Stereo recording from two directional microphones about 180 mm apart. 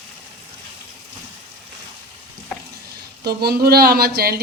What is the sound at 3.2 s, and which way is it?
Speech, 60° right (ahead or behind).